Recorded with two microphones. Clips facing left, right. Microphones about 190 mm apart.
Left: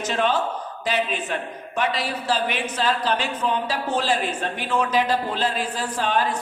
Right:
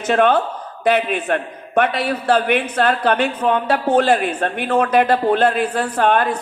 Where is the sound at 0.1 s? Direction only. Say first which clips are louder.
Right 8 dB; 60° right (ahead or behind).